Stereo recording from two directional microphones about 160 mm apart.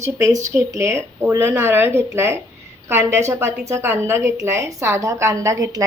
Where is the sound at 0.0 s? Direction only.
20° right (ahead or behind).